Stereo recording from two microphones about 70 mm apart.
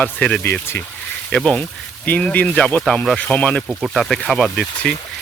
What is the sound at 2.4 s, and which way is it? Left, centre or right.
Speech, centre.